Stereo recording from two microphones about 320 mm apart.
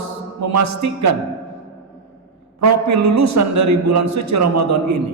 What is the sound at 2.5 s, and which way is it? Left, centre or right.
A man's voice, right.